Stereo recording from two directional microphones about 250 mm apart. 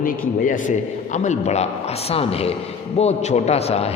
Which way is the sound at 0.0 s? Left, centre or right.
Left.